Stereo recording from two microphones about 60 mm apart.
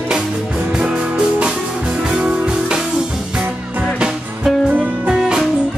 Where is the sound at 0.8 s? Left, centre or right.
Centre.